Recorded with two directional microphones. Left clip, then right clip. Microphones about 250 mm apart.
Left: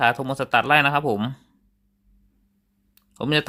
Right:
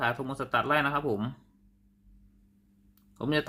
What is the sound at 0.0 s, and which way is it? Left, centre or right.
Speech, left.